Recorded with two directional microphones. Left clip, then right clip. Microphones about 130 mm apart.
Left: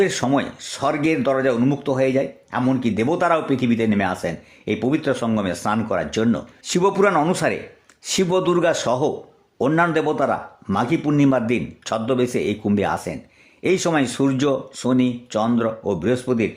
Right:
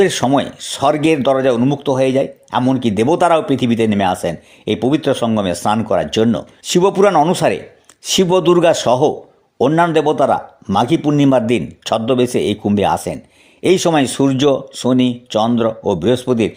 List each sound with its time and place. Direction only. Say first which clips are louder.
0.0 s speech: right 6 dB; 35° right (ahead or behind)